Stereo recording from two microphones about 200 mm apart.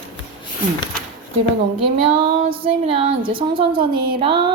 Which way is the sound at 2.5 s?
25° right (ahead or behind).